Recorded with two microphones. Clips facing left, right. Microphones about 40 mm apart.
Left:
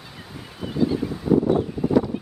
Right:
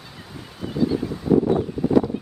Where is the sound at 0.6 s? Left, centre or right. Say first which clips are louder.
Even; centre.